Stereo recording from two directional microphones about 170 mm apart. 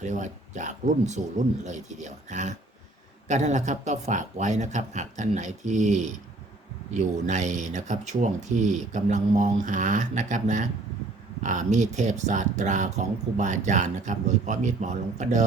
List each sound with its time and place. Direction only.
0.0 s speech: 45° right (ahead or behind)